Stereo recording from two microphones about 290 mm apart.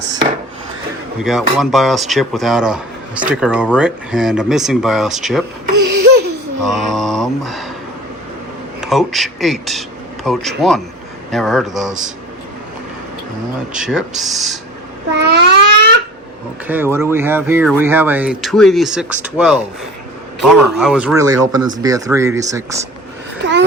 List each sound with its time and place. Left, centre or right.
1.2 s speech: centre
5.7 s laughter: right
6.0 s laughter: right
6.7 s mantra: centre
8.8 s speech: centre
13.7 s speech: centre
15.1 s a sound: right
16.6 s speech: centre